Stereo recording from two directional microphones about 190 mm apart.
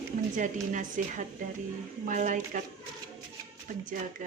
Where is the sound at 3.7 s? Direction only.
45° right (ahead or behind).